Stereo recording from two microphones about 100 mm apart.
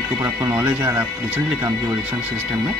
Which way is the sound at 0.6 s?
20° right (ahead or behind).